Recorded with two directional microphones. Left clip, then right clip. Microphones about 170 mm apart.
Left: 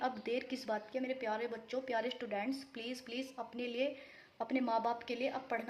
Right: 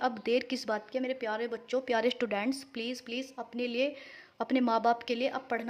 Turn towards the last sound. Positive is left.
turn(degrees=-35)  # may be behind; listen again after turning